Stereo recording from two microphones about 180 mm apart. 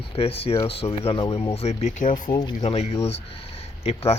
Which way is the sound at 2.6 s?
35° left (ahead or behind).